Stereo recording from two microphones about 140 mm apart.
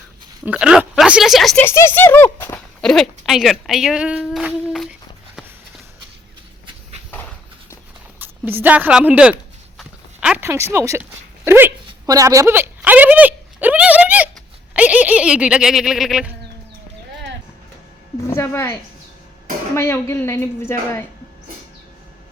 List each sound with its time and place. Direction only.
0.4 s speech: 5° right (ahead or behind)
1.6 s speech: 15° left (ahead or behind)
2.8 s speech: centre (ahead or behind)
8.2 s speech: 15° right (ahead or behind)
9.7 s dog: 5° right (ahead or behind)
10.4 s speech: 20° right (ahead or behind)
11.4 s a sound: 15° right (ahead or behind)
14.7 s speech: 10° right (ahead or behind)
18.3 s a woman's voice: 20° left (ahead or behind)